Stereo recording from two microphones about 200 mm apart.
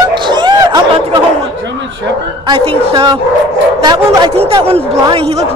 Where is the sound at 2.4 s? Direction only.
25° right (ahead or behind).